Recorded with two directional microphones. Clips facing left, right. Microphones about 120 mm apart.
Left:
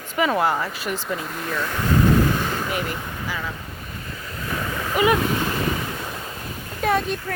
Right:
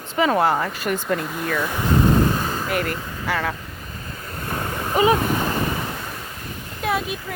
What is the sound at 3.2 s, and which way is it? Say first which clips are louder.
Speech: right 8 dB; 65° right (ahead or behind).